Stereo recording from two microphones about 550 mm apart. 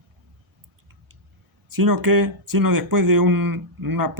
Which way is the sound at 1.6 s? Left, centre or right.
Right.